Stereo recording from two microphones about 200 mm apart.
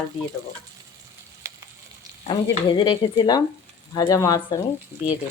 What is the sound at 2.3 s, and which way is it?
Dishes, 25° left (ahead or behind).